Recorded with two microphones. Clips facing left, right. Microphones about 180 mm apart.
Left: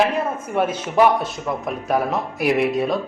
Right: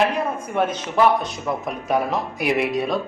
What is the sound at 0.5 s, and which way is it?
A woman's voice, 10° left (ahead or behind).